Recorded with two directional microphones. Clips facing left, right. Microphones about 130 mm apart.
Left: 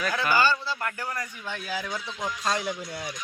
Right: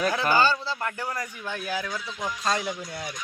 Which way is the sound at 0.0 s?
25° right (ahead or behind).